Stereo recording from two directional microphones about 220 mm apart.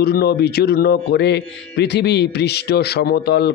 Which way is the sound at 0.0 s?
45° left (ahead or behind).